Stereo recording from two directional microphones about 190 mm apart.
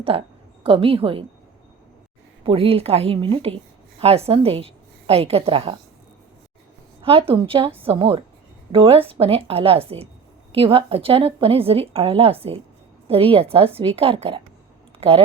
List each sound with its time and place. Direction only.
0.0 s a woman's voice: 30° right (ahead or behind)
2.4 s a woman's voice: 30° right (ahead or behind)
7.0 s a woman's voice: 30° right (ahead or behind)